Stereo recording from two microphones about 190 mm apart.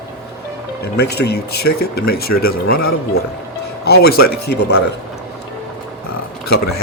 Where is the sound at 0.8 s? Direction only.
60° left (ahead or behind).